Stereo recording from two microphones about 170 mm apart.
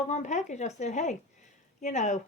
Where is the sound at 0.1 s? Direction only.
45° left (ahead or behind).